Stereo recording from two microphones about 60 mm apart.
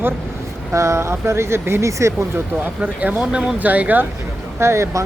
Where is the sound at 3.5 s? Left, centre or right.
Right.